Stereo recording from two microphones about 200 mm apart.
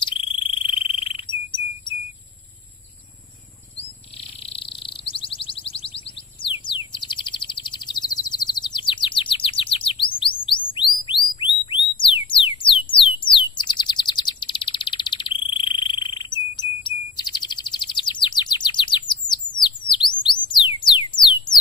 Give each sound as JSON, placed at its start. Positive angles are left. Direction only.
{"t": 0.0, "sound": "insect", "side_deg": 25}
{"t": 4.4, "sound": "synthesizer", "side_deg": 30}
{"t": 10.1, "sound": "music", "side_deg": 25}
{"t": 12.9, "sound": "bird", "side_deg": 25}